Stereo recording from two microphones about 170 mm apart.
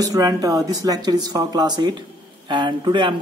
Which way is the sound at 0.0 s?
20° right (ahead or behind).